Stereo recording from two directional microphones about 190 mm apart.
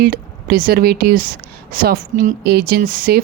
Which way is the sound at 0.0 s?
50° right (ahead or behind).